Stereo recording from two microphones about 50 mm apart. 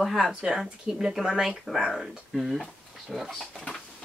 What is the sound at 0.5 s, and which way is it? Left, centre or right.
Speech, centre.